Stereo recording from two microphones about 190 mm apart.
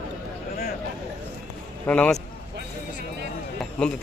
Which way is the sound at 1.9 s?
5° left (ahead or behind).